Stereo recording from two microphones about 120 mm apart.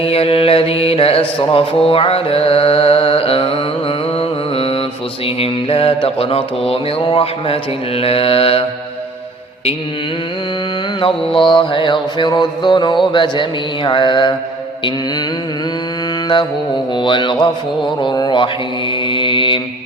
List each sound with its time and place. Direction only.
0.0 s music: 55° left (ahead or behind)
11.0 s mantra: 45° left (ahead or behind)
13.1 s music: 40° left (ahead or behind)
16.9 s music: 40° left (ahead or behind)
18.0 s mantra: 40° left (ahead or behind)